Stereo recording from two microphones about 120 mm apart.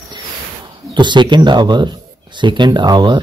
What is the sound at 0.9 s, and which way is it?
Speech, 40° right (ahead or behind).